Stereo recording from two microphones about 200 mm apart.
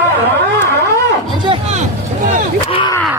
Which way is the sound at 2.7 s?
25° left (ahead or behind).